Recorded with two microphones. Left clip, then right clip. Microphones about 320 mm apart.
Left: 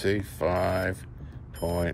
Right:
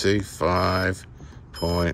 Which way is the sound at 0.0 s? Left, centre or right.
Centre.